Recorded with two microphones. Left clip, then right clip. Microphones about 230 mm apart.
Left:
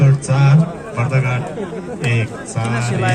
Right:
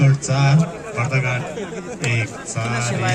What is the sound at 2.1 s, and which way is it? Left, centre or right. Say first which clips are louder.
Speech: even; centre.